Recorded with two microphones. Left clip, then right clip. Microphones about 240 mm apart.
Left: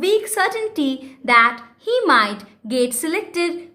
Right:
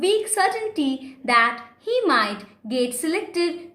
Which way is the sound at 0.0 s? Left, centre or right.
Centre.